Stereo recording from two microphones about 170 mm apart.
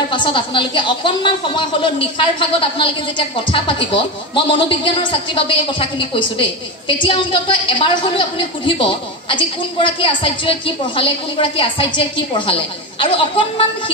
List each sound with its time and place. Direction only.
0.1 s a woman's voice: 30° left (ahead or behind)